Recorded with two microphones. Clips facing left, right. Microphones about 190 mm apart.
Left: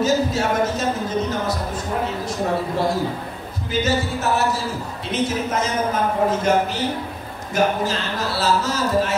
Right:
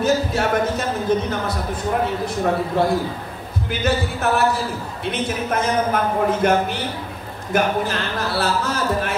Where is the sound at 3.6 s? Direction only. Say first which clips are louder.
Left 1 dB; 60° right (ahead or behind).